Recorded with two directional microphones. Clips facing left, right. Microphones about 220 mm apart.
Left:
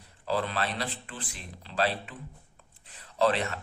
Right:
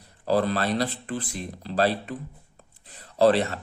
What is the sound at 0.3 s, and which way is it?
Speech, 40° right (ahead or behind).